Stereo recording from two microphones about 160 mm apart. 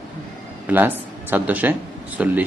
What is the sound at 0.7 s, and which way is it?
Speech, 10° right (ahead or behind).